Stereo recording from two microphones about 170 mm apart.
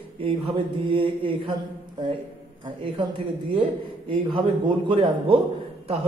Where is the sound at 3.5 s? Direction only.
30° right (ahead or behind).